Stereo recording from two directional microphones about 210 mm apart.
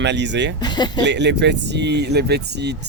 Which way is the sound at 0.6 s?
20° left (ahead or behind).